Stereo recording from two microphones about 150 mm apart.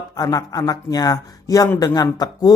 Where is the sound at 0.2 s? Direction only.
25° left (ahead or behind).